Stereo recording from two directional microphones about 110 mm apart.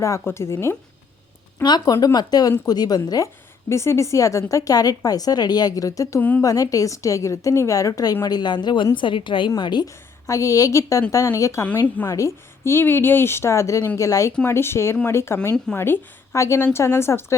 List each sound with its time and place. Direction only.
0.0 s a woman's voice: 25° left (ahead or behind)
1.6 s speech: 40° left (ahead or behind)
3.7 s speech: 25° left (ahead or behind)
6.1 s a woman's voice: 15° left (ahead or behind)
6.4 s a woman's voice: 30° left (ahead or behind)